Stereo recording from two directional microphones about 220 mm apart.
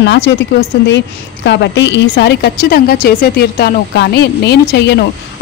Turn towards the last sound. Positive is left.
turn(degrees=50)  # may be behind; listen again after turning